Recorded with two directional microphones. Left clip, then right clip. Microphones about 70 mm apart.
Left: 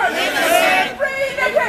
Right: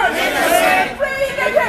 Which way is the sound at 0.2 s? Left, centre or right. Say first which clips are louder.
Right 1 dB; left.